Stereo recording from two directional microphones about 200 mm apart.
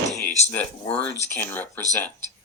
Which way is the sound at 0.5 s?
10° left (ahead or behind).